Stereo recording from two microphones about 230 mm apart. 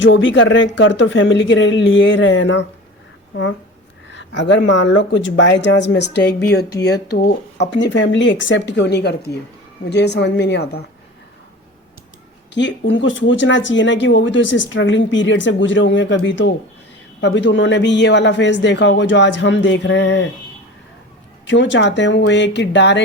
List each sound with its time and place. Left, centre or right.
0.0 s a man's voice: left
4.1 s a man's voice: left
12.5 s a man's voice: left
21.4 s a man's voice: left